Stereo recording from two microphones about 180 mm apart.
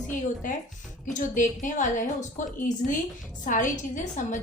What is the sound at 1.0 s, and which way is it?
A woman's voice, 45° left (ahead or behind).